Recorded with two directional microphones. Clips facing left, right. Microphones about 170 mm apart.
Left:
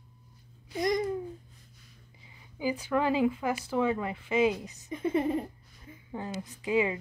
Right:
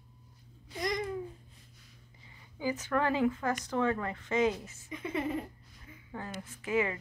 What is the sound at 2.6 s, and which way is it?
Speech, 15° left (ahead or behind).